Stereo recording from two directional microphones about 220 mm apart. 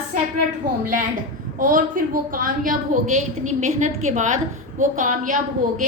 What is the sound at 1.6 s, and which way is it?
A woman's voice, 40° right (ahead or behind).